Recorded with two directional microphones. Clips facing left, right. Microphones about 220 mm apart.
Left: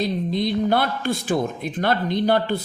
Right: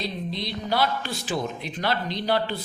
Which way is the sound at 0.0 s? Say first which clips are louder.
Left 8 dB; 50° left (ahead or behind).